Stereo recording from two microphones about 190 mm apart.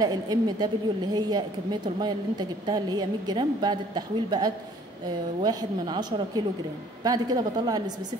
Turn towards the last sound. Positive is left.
turn(degrees=-20)  # may be behind; listen again after turning